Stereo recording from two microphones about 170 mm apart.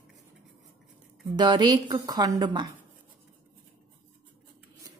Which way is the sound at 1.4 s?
25° right (ahead or behind).